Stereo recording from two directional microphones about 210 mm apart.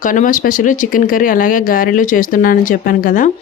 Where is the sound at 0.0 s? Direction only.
40° left (ahead or behind).